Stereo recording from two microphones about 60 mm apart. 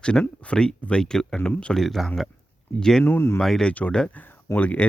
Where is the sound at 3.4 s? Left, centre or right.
Centre.